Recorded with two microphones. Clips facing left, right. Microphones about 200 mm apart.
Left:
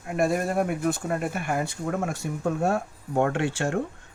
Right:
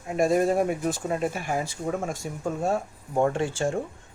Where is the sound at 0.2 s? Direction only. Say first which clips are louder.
Right 3 dB; 60° left (ahead or behind).